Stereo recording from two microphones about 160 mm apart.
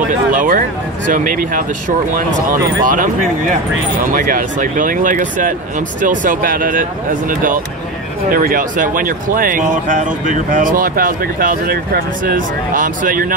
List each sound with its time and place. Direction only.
0.3 s speech: 55° right (ahead or behind)
2.8 s speech: 55° right (ahead or behind)